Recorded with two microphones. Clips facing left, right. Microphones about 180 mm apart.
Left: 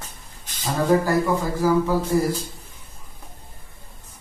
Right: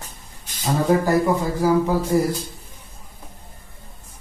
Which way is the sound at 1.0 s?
20° right (ahead or behind).